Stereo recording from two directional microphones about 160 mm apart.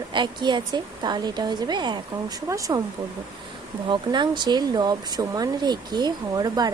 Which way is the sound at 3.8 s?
30° right (ahead or behind).